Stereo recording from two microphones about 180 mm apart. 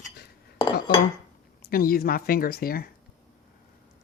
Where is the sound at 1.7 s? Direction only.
55° left (ahead or behind).